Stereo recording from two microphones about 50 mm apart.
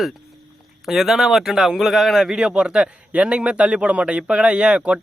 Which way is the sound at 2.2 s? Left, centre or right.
Centre.